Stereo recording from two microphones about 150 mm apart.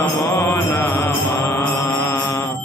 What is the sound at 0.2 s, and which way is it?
Mantra, 15° left (ahead or behind).